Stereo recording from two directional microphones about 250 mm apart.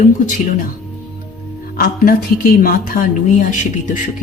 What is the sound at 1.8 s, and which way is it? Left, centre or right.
Speech, left.